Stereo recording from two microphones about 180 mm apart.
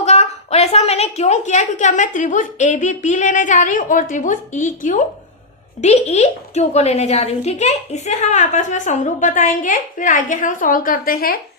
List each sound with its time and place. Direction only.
0.0 s a woman's voice: 35° left (ahead or behind); by 11.3 s 55° left (ahead or behind)